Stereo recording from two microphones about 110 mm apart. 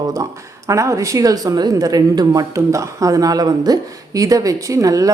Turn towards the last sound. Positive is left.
turn(degrees=-30)  # may be behind; listen again after turning